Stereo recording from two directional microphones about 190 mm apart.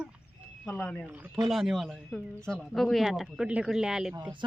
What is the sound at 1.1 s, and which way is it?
Speech, 10° right (ahead or behind).